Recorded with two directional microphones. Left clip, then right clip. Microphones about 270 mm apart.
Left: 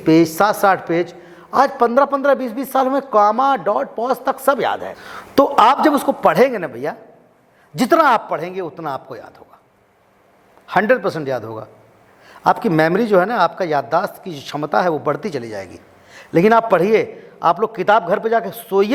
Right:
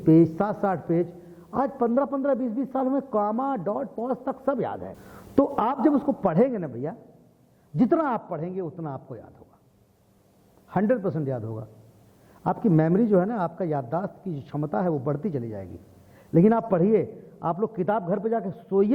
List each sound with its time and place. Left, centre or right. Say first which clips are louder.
0.0 s a man's voice: left 7 dB; centre
10.7 s a man's voice: left 10 dB; centre
11.4 s a man's voice: left 9 dB; centre